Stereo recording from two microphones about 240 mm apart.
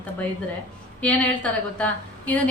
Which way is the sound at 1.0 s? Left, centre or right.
Centre.